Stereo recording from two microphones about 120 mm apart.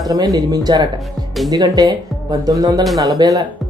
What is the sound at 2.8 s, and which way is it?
Speech, centre (ahead or behind).